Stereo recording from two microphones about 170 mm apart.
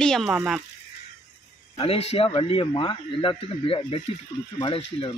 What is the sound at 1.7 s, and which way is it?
A man's voice, 35° left (ahead or behind).